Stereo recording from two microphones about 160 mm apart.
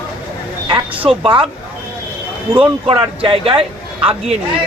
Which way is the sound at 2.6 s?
35° right (ahead or behind).